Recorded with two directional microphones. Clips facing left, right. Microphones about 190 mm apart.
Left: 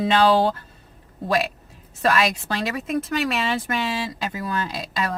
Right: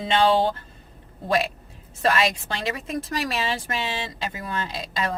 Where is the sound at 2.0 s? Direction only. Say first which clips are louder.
Left 1 dB; 25° right (ahead or behind).